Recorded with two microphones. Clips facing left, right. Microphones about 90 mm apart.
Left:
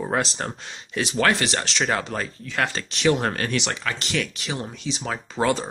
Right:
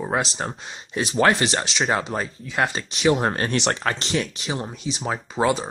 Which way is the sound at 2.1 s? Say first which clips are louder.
Right 2 dB; 15° right (ahead or behind).